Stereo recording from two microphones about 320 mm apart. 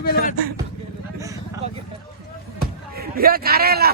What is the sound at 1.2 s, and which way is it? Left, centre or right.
Vehicle, centre.